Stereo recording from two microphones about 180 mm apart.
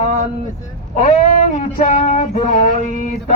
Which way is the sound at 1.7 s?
45° left (ahead or behind).